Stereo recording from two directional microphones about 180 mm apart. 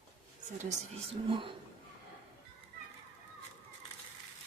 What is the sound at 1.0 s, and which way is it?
Speech, 30° right (ahead or behind).